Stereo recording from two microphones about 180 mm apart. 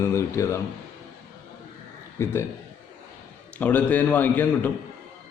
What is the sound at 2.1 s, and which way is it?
Speech, 15° left (ahead or behind).